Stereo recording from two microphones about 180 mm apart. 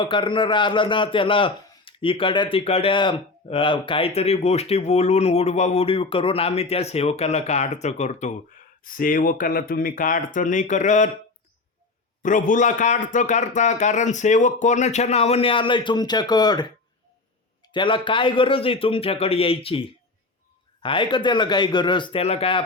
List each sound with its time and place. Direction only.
0.0 s a man's voice: 25° left (ahead or behind); by 11.1 s 40° left (ahead or behind)
12.2 s a man's voice: 45° left (ahead or behind); by 22.6 s 30° left (ahead or behind)